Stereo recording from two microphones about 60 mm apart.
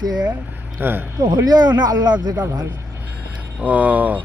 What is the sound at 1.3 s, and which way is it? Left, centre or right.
A man's voice, right.